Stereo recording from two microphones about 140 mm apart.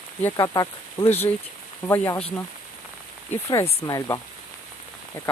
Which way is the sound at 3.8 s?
25° left (ahead or behind).